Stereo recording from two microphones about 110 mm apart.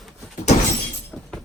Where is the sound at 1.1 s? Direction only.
Centre (ahead or behind).